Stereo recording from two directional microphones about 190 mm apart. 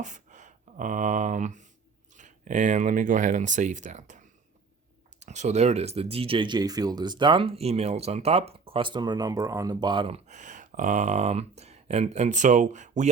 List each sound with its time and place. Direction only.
0.0 s a sound: 40° right (ahead or behind)
2.1 s speech: 40° right (ahead or behind)
5.2 s speech: 40° right (ahead or behind)
10.2 s speech: 40° right (ahead or behind)